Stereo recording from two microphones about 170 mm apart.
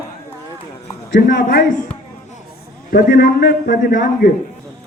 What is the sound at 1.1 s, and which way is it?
Speech, 55° left (ahead or behind).